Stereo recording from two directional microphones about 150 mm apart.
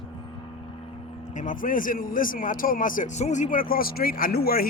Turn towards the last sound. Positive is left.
turn(degrees=90)